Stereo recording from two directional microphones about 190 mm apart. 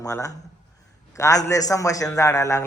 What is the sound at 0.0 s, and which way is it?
A man's voice, 15° left (ahead or behind).